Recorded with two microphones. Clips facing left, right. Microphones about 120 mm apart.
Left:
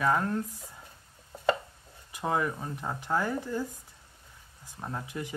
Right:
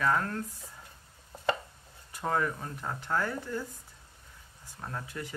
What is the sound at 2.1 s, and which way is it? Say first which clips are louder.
Speech: left 1 dB; 15° left (ahead or behind).